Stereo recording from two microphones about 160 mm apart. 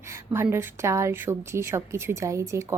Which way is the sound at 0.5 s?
15° right (ahead or behind).